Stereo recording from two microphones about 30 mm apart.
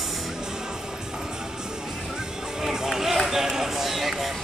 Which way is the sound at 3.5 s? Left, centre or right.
Centre.